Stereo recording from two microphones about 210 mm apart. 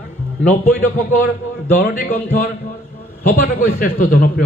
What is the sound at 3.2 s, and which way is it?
A man's voice, 40° left (ahead or behind).